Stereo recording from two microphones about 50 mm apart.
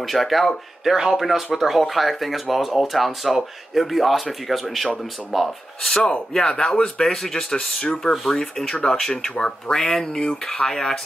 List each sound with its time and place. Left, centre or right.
0.0 s speech: centre